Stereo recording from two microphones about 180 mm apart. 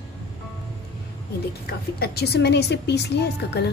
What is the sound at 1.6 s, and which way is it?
A woman's voice, 60° left (ahead or behind).